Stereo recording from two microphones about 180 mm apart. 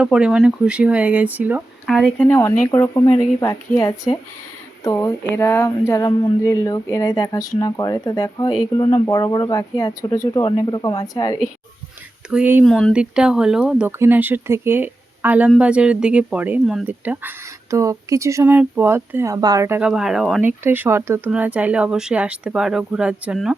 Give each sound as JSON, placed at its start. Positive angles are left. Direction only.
{"t": 0.0, "sound": "speech", "side_deg": -5}
{"t": 1.9, "sound": "speech", "side_deg": 5}
{"t": 2.2, "sound": "speech", "side_deg": 15}
{"t": 12.3, "sound": "speech", "side_deg": -10}
{"t": 12.6, "sound": "speech", "side_deg": 0}
{"t": 20.7, "sound": "speech", "side_deg": -10}